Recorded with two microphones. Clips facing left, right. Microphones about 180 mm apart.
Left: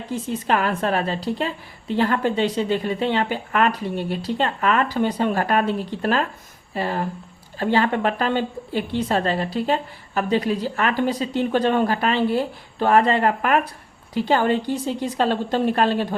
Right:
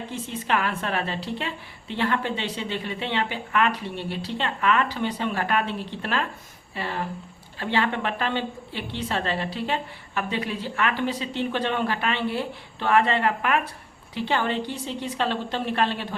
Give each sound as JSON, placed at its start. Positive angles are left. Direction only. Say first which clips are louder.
{"t": 0.1, "sound": "a woman's voice", "louder": "left 5 dB", "side_deg": 40}